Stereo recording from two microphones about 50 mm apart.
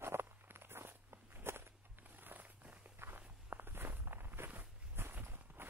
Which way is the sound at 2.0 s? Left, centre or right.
Right.